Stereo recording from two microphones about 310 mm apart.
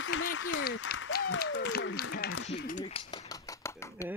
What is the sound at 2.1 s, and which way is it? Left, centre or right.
Speech, left.